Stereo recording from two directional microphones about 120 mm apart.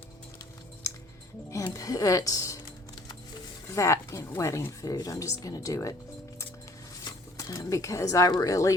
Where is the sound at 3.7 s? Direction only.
25° left (ahead or behind).